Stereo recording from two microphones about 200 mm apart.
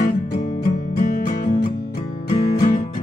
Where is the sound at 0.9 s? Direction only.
40° left (ahead or behind).